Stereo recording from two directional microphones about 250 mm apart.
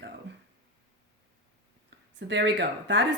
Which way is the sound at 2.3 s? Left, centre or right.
Right.